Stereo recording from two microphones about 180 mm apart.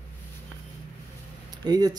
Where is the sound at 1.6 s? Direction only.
20° right (ahead or behind).